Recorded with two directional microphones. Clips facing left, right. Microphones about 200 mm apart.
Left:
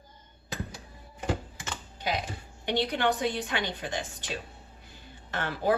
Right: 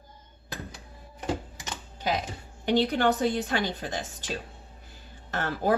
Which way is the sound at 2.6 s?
40° right (ahead or behind).